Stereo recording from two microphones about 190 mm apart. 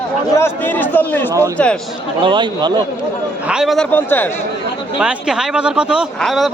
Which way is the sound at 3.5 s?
Centre (ahead or behind).